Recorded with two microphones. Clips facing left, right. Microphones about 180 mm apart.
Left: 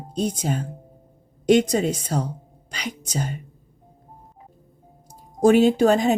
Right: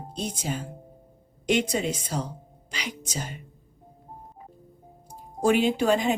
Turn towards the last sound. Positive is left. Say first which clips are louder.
# left 5 dB
turn(degrees=45)  # may be behind; listen again after turning